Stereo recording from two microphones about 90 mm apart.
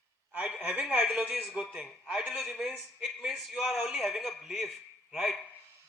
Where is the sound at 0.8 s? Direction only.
10° right (ahead or behind).